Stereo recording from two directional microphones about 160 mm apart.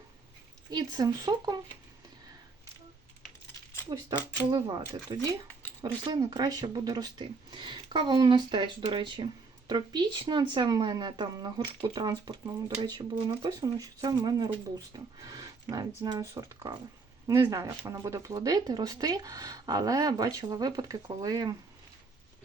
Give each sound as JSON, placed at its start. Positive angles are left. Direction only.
{"t": 0.7, "sound": "speech", "side_deg": -25}
{"t": 3.9, "sound": "speech", "side_deg": -30}